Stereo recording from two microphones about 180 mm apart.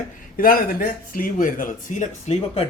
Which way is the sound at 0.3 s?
55° left (ahead or behind).